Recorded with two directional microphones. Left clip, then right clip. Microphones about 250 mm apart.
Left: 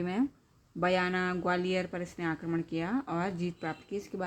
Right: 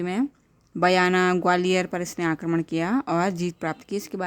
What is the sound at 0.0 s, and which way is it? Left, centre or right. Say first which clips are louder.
Speech: right 6 dB; right.